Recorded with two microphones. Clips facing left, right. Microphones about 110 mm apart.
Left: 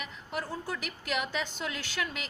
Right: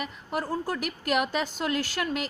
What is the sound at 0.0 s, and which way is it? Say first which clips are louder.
A woman's voice: right 6 dB; 45° right (ahead or behind).